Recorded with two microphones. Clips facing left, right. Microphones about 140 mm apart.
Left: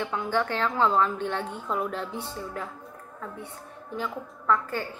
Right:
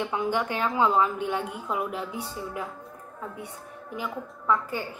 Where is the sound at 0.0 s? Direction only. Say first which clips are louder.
Even; 15° right (ahead or behind).